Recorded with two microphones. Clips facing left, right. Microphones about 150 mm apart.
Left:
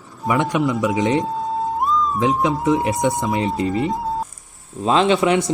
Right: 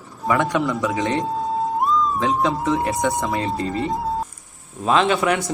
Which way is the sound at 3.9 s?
Centre (ahead or behind).